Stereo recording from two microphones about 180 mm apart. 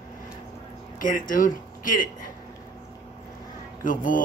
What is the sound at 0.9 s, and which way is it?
Speech, 50° left (ahead or behind).